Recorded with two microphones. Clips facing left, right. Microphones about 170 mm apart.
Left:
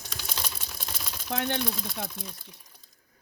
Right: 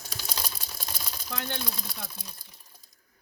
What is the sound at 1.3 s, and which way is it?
Speech, 65° left (ahead or behind).